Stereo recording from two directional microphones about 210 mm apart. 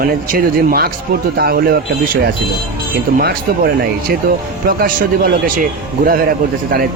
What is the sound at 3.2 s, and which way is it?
Speech, 45° right (ahead or behind).